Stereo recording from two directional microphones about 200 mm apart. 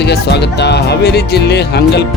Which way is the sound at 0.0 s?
55° left (ahead or behind).